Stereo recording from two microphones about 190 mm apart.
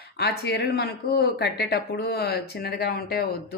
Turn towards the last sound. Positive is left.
turn(degrees=55)  # may be behind; listen again after turning